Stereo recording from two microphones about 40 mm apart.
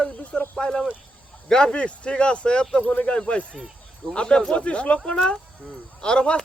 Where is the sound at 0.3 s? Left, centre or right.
Centre.